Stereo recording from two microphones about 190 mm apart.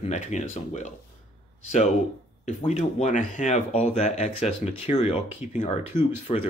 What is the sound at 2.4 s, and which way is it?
Speech, 40° left (ahead or behind).